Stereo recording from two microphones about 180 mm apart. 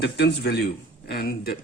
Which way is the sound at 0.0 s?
65° left (ahead or behind).